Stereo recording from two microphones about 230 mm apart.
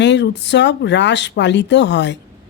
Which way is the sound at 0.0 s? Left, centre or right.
Left.